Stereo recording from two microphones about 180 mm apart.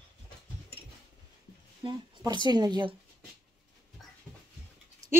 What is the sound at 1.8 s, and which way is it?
Speech, 25° right (ahead or behind).